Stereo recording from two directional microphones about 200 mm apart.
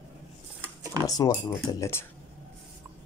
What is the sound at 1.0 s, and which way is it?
Speech, 20° right (ahead or behind).